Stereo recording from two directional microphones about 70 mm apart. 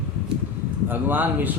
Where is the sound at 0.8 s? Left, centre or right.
Right.